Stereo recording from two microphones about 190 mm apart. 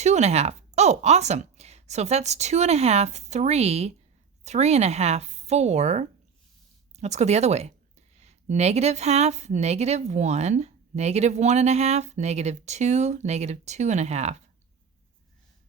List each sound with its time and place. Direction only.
0.0 s speech: 35° right (ahead or behind)